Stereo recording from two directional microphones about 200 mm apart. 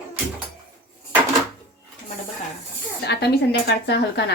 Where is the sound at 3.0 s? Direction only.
55° left (ahead or behind).